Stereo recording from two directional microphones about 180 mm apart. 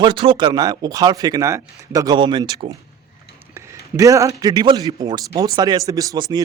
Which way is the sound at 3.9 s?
15° right (ahead or behind).